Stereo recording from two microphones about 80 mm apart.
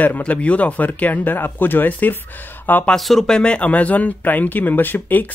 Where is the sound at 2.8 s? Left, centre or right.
Centre; by 5.3 s left.